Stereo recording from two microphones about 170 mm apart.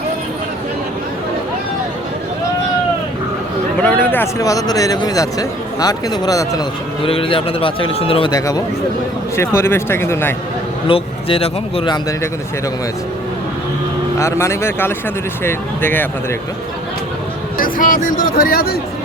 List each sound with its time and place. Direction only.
3.8 s speech: 10° left (ahead or behind)
7.0 s a man's voice: 30° left (ahead or behind); by 10.3 s 15° left (ahead or behind)
10.8 s a man's voice: 35° left (ahead or behind)
14.2 s speech: 15° left (ahead or behind)
17.6 s speech: 50° left (ahead or behind)